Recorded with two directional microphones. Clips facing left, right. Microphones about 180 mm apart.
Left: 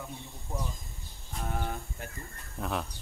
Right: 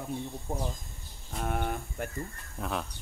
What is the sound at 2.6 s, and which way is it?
Speech, centre (ahead or behind).